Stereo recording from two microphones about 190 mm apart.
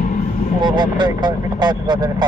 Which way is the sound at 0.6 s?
25° right (ahead or behind).